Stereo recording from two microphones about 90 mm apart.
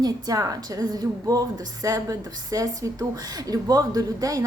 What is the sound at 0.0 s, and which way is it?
A woman's voice, 40° right (ahead or behind).